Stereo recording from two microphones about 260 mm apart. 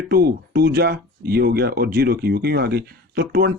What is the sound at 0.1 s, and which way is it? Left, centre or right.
Speech, right.